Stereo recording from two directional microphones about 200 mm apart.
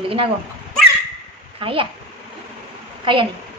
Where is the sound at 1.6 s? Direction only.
25° right (ahead or behind).